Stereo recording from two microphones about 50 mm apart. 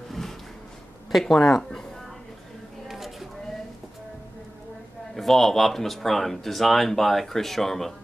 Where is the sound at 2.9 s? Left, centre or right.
Centre.